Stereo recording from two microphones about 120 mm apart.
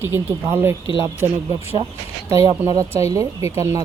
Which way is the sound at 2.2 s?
25° right (ahead or behind).